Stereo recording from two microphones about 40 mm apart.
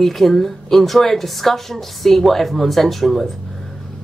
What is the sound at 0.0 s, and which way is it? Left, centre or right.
Speech, centre.